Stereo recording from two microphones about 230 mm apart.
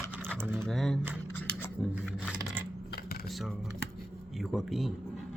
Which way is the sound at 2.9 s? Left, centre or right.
Left.